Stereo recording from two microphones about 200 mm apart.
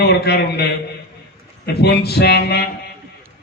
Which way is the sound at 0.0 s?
55° left (ahead or behind).